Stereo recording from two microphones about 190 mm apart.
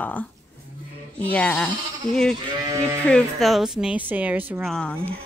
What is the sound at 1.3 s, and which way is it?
Speech, 5° left (ahead or behind).